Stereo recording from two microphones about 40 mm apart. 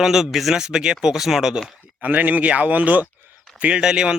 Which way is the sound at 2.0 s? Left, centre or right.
Right.